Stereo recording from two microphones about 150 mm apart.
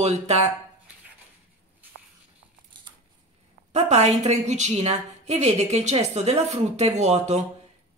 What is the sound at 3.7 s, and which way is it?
A woman's voice, 45° right (ahead or behind).